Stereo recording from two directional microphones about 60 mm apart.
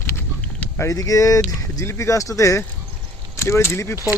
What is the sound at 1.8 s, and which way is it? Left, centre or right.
Speech, left.